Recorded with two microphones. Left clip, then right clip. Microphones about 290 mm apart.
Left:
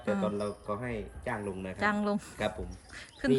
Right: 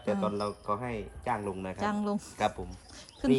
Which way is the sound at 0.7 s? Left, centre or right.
Centre.